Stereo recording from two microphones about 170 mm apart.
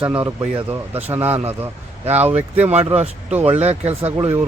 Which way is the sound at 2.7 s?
40° right (ahead or behind).